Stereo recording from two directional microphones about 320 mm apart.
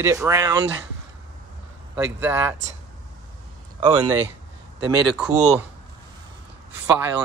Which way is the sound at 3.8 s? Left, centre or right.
Centre.